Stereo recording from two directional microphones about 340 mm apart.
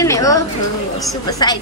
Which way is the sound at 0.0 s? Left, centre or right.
Centre.